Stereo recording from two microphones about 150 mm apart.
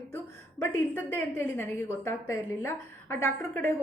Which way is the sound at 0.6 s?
15° left (ahead or behind).